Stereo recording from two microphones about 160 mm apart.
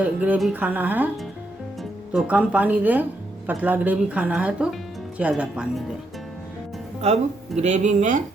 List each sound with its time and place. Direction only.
0.0 s speech: 10° right (ahead or behind)
7.0 s speech: 40° right (ahead or behind)